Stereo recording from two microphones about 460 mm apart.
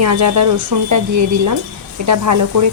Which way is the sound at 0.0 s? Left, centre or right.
Right.